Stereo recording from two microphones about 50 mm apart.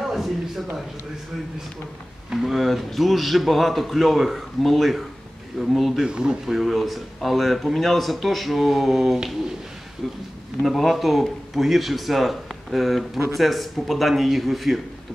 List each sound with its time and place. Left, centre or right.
0.0 s a sound: centre
2.4 s speech: centre
6.0 s speech: centre
6.5 s speech: centre
10.6 s a man's voice: centre